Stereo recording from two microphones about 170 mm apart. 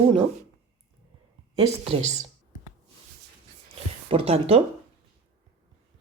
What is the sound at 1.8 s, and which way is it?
Speech, 35° right (ahead or behind).